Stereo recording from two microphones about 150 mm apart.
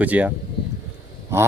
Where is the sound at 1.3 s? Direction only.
15° right (ahead or behind).